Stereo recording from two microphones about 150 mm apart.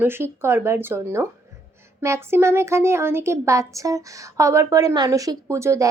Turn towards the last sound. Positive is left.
turn(degrees=-20)  # may be behind; listen again after turning